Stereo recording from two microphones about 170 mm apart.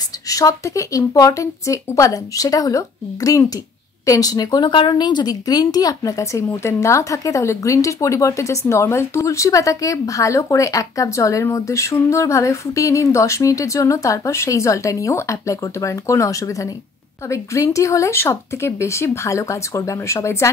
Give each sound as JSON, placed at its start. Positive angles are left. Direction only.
{"t": 0.3, "sound": "speech", "side_deg": 20}